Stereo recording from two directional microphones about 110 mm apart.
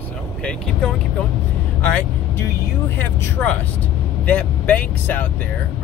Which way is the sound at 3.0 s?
15° left (ahead or behind).